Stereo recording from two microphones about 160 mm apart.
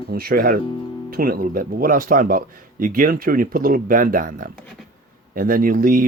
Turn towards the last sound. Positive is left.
turn(degrees=-60)  # may be behind; listen again after turning